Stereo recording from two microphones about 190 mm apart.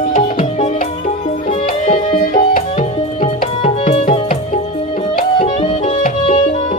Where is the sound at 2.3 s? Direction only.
45° left (ahead or behind).